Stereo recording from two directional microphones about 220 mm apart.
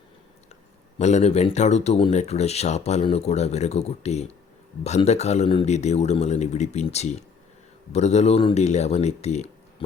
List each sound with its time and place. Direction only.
0.9 s speech: 30° left (ahead or behind)